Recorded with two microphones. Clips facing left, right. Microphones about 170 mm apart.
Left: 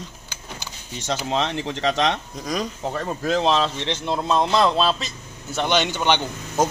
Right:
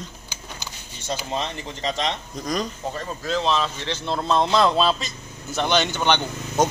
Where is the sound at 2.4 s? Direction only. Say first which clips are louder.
Right 1 dB; 5° left (ahead or behind).